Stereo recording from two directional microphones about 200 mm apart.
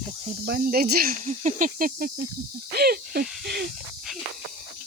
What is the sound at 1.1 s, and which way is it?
Snake, 35° right (ahead or behind).